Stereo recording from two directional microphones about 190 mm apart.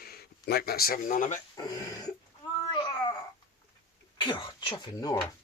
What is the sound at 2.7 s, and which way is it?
Babbling, 25° left (ahead or behind).